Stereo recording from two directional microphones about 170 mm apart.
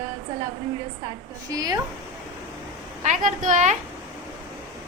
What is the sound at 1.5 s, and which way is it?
Speech, 20° right (ahead or behind).